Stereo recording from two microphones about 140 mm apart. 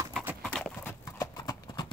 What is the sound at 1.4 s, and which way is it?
Clip-clop, 30° left (ahead or behind).